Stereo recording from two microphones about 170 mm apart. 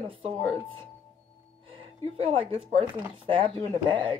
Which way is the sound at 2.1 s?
35° right (ahead or behind).